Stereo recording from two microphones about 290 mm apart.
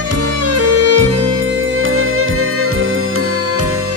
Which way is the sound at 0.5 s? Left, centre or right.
Right.